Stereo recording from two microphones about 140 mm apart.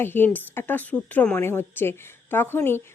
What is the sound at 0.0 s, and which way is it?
A woman's voice, 15° left (ahead or behind).